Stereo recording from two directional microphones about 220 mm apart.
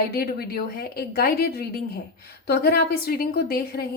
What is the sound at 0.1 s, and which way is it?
A woman's voice, 45° left (ahead or behind).